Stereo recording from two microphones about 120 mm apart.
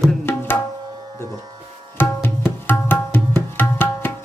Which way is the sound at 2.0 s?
15° left (ahead or behind).